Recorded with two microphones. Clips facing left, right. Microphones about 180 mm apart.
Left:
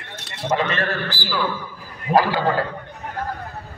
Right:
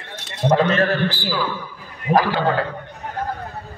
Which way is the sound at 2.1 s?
20° right (ahead or behind).